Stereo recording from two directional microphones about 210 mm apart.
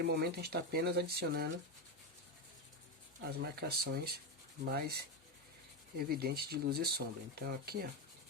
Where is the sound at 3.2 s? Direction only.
45° right (ahead or behind).